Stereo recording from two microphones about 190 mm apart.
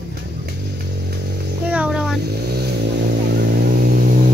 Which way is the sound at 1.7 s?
5° right (ahead or behind).